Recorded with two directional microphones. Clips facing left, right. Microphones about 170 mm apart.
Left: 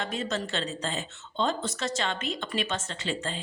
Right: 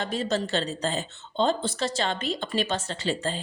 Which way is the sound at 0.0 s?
35° right (ahead or behind).